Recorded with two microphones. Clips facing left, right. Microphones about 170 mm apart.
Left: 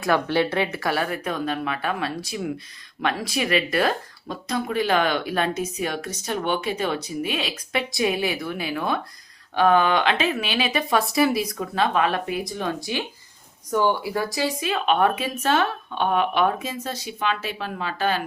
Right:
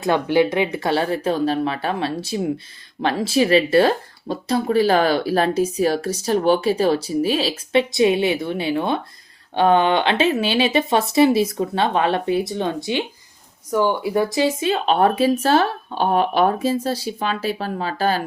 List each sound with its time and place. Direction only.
0.0 s speech: 15° right (ahead or behind); by 18.2 s 35° right (ahead or behind)